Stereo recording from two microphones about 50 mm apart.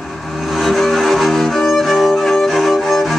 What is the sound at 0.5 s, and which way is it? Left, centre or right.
Music, centre.